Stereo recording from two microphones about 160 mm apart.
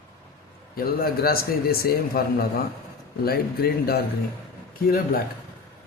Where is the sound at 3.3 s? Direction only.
75° left (ahead or behind).